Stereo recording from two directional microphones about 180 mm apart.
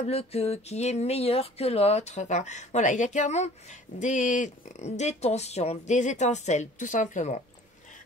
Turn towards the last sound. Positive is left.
turn(degrees=45)  # may be behind; listen again after turning